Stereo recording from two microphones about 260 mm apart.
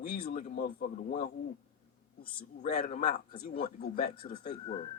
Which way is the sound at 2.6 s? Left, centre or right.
Left.